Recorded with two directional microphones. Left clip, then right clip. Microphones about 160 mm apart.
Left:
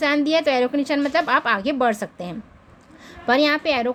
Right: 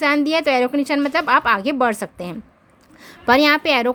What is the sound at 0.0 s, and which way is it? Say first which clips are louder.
A woman's voice: right 2 dB; 25° right (ahead or behind).